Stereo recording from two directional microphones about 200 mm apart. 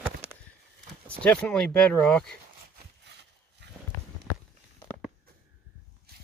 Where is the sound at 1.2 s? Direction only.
5° left (ahead or behind).